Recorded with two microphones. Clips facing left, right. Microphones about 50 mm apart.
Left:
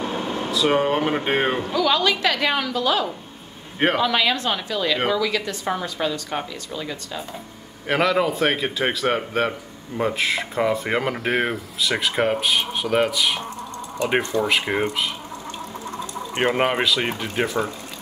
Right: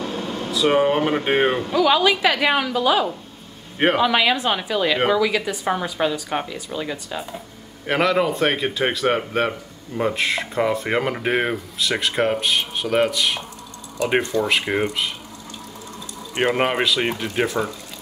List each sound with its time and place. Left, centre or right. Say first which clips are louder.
0.0 s air conditioning: left 1 dB; left
0.5 s a man's voice: right 2 dB; centre
7.8 s a man's voice: right 1 dB; centre
16.4 s a man's voice: even; centre